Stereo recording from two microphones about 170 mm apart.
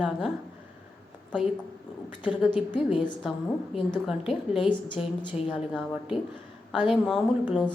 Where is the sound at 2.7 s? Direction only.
25° left (ahead or behind).